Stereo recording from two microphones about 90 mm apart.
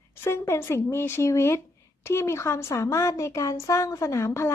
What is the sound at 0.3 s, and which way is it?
A woman's voice, 30° left (ahead or behind).